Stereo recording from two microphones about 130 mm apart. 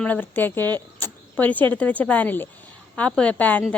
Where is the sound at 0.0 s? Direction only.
10° left (ahead or behind).